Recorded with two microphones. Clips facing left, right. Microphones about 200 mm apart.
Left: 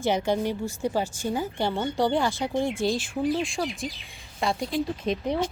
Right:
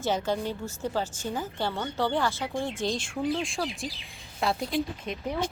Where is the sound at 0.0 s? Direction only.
15° left (ahead or behind).